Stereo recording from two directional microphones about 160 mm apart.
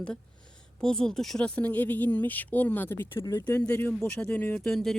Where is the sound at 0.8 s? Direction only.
5° left (ahead or behind).